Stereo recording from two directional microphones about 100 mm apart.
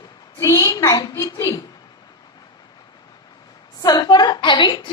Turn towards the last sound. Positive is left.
turn(degrees=50)  # may be behind; listen again after turning